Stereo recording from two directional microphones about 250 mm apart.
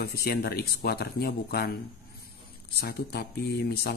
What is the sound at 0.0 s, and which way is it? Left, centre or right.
Speech, left.